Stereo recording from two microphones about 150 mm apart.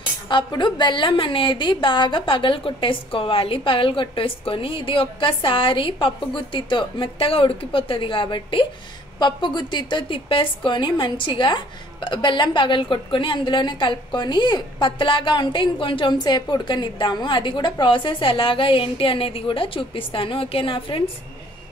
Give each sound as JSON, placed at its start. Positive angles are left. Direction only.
{"t": 0.3, "sound": "a woman's voice", "side_deg": 30}